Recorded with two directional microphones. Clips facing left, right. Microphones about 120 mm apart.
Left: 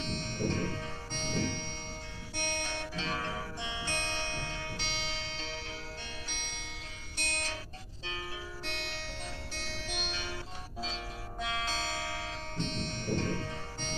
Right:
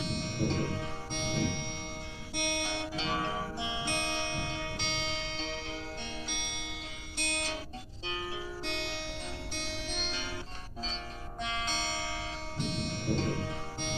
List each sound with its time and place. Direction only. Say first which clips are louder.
0.0 s music: right 2 dB; 10° right (ahead or behind)
7.2 s music: right 3 dB; 15° right (ahead or behind)
8.6 s music: right 3 dB; 20° right (ahead or behind)
10.8 s music: left 1 dB; 5° left (ahead or behind)
12.5 s music: right 2 dB; 10° right (ahead or behind)